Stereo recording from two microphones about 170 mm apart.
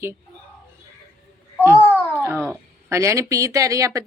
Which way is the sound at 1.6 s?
10° right (ahead or behind).